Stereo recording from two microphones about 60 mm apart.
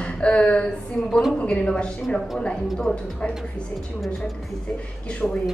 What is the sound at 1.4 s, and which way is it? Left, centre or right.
A woman's voice, centre.